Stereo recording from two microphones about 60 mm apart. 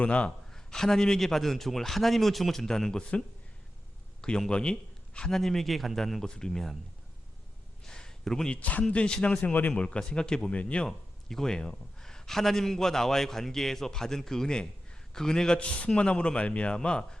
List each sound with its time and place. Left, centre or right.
0.0 s a man's voice: centre
0.5 s a man's voice: centre
6.2 s a man's voice: centre
7.9 s a sound: centre
8.4 s a man's voice: left
10.8 s a man's voice: centre